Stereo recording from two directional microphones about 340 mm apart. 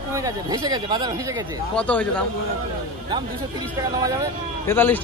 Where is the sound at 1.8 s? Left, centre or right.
Centre.